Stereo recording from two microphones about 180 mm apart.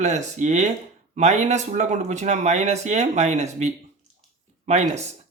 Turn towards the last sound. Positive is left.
turn(degrees=-40)  # may be behind; listen again after turning